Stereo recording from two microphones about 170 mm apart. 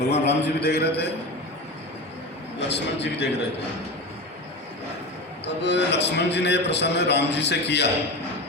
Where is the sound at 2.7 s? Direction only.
90° left.